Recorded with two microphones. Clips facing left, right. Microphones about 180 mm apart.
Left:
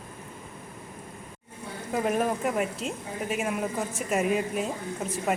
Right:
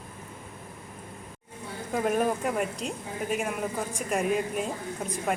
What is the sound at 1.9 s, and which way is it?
A woman's voice, centre (ahead or behind).